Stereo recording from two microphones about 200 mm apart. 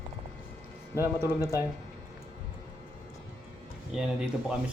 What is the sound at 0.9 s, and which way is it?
Speech, 10° right (ahead or behind).